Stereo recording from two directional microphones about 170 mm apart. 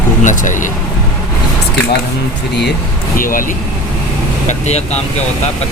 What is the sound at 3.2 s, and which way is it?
Speech, 55° left (ahead or behind).